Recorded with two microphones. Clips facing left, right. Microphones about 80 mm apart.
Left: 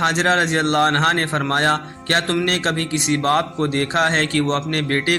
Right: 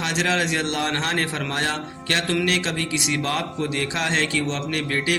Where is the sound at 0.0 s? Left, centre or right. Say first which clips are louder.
Left 6 dB; left.